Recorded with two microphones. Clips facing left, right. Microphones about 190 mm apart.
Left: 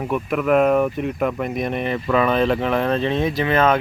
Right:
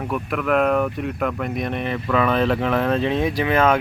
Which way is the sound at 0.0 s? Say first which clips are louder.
Left 3 dB; centre (ahead or behind).